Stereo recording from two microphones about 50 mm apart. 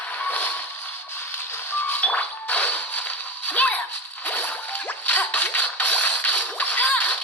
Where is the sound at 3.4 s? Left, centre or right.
Left.